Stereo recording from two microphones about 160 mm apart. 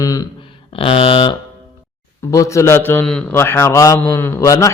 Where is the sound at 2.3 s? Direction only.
20° left (ahead or behind).